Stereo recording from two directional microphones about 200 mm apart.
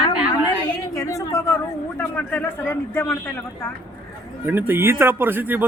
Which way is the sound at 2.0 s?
10° left (ahead or behind).